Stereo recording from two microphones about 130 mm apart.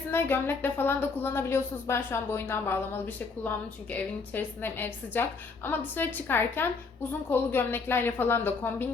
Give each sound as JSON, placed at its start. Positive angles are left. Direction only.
{"t": 0.1, "sound": "a woman's voice", "side_deg": 15}
{"t": 3.9, "sound": "a woman's voice", "side_deg": 15}